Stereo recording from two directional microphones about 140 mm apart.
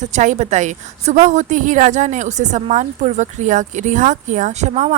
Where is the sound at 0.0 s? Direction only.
60° right (ahead or behind).